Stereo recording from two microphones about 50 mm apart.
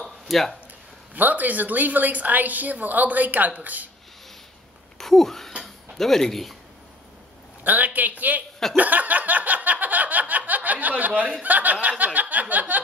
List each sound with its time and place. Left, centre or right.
0.0 s a sound: centre
1.1 s a woman's voice: right
4.9 s speech: centre
7.6 s a woman's voice: right
8.7 s a sound: right
11.4 s speech: right